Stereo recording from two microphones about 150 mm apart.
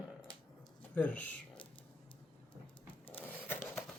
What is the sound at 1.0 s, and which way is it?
Speech, 10° left (ahead or behind).